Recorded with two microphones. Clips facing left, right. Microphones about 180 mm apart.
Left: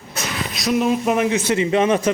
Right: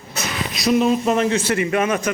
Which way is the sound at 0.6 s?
5° left (ahead or behind).